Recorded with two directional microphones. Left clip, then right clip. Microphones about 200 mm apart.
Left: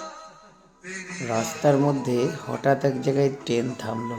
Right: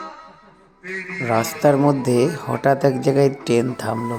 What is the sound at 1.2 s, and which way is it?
Speech, 30° right (ahead or behind).